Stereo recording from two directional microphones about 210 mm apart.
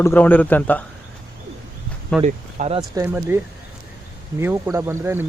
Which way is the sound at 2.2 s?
35° right (ahead or behind).